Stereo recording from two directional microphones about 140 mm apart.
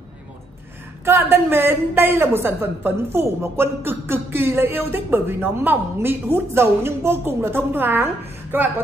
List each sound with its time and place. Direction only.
1.0 s a woman's voice: 15° right (ahead or behind)